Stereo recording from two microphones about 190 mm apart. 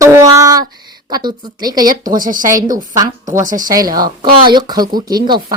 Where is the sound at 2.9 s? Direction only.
15° right (ahead or behind).